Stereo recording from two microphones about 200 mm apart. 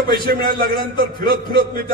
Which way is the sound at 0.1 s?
50° right (ahead or behind).